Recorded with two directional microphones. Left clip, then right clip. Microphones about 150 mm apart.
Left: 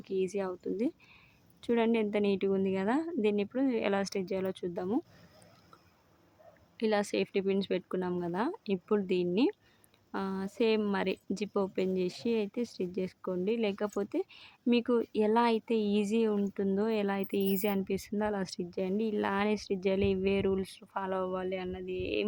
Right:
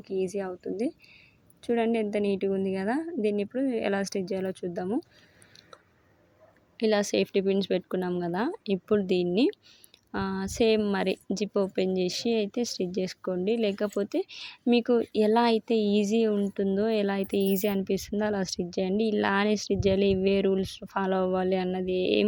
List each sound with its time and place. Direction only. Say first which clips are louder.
0.0 s a woman's voice: right 2 dB; 10° right (ahead or behind)
6.7 s speech: right 5 dB; 25° right (ahead or behind)